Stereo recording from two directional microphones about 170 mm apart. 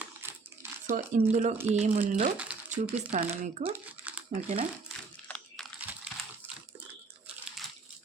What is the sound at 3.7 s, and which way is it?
Crumpling, 10° right (ahead or behind).